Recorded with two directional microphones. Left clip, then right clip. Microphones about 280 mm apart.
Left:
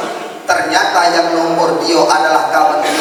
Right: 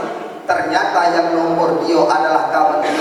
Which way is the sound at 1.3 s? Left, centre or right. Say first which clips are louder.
Left 2 dB; centre.